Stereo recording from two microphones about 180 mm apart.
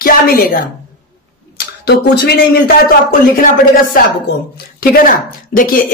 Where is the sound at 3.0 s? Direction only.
50° left (ahead or behind).